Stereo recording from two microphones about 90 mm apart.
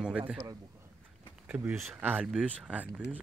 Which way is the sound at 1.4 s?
25° right (ahead or behind).